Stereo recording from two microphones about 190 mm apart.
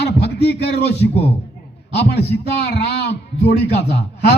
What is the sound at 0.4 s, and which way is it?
A man's voice, 60° left (ahead or behind).